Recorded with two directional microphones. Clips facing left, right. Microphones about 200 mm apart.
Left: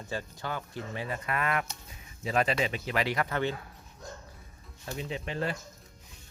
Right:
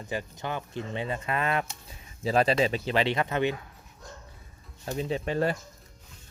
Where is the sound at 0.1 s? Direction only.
20° right (ahead or behind).